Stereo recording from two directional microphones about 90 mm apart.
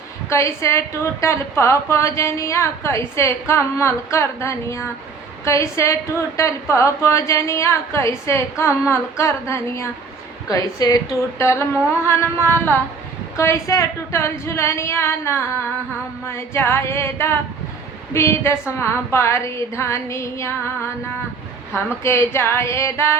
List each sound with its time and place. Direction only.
0.3 s a woman's voice: 35° left (ahead or behind)
10.5 s a woman's voice: 40° left (ahead or behind)
22.0 s a woman's voice: 30° left (ahead or behind)